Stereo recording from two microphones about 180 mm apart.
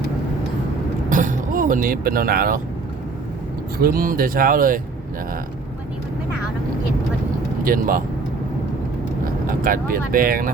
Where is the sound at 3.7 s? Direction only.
55° right (ahead or behind).